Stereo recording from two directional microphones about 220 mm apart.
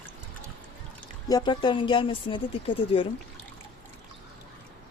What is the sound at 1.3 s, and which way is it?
Speech, 20° left (ahead or behind).